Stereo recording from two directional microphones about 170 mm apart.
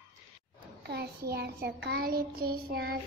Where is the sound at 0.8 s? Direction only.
75° right (ahead or behind).